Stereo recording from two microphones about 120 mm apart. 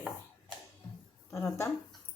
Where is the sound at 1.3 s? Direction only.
25° left (ahead or behind).